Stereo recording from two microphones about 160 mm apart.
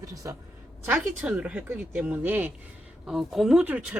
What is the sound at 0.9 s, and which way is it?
Speech, 10° right (ahead or behind).